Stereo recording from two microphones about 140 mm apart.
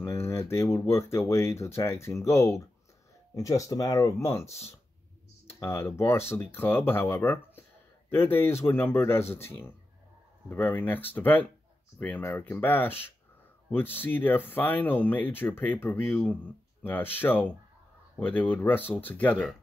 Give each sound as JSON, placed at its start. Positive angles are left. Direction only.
{"t": 0.0, "sound": "speech", "side_deg": 20}